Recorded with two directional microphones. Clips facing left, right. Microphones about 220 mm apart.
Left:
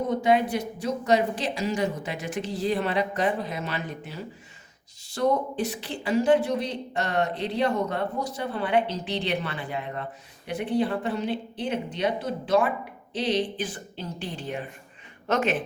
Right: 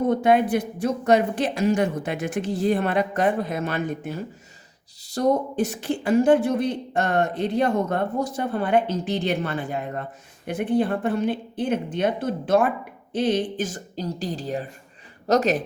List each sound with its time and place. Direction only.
0.1 s speech: 55° right (ahead or behind); by 15.6 s 40° right (ahead or behind)